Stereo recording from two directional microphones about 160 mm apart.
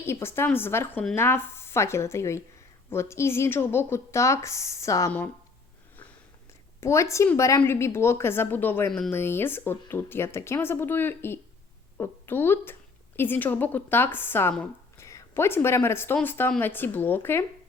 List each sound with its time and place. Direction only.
0.0 s speech: 15° left (ahead or behind)
6.7 s speech: 15° left (ahead or behind)